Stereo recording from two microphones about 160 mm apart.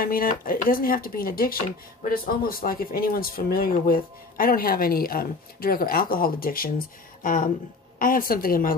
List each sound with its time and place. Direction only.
0.0 s speech: 65° left (ahead or behind)